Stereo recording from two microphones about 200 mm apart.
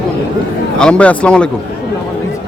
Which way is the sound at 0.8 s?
5° left (ahead or behind).